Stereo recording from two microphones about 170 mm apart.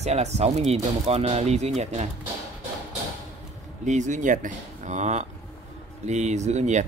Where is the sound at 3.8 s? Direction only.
45° right (ahead or behind).